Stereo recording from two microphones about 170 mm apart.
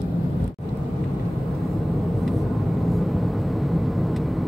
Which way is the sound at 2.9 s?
Centre (ahead or behind).